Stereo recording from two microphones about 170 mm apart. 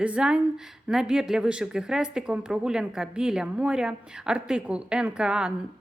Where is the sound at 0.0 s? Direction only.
5° right (ahead or behind).